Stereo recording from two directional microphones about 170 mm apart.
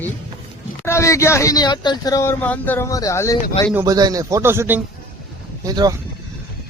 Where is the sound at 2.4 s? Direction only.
10° left (ahead or behind).